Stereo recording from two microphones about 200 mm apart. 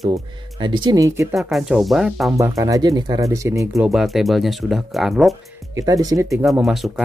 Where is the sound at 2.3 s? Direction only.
15° right (ahead or behind).